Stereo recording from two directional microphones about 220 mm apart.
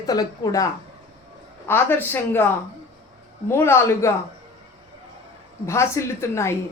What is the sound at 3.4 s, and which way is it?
Speech, 10° left (ahead or behind).